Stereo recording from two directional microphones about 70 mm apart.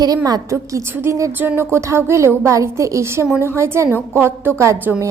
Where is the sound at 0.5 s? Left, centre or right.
Right.